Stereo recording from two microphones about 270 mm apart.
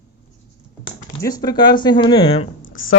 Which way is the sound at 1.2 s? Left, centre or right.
Centre.